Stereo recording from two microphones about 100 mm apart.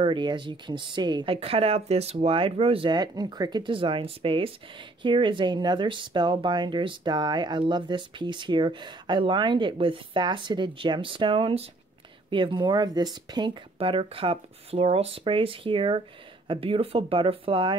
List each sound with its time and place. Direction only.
0.0 s speech: 50° right (ahead or behind)
1.3 s speech: 70° right (ahead or behind)
2.9 s speech: 45° right (ahead or behind)
13.7 s speech: 65° right (ahead or behind)